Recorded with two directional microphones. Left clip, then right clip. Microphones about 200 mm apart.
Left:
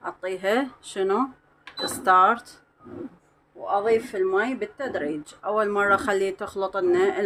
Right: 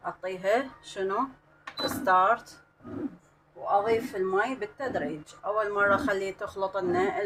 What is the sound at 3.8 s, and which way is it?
Speech, 50° left (ahead or behind).